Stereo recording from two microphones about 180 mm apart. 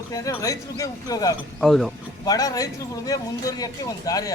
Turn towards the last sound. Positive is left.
turn(degrees=20)  # may be behind; listen again after turning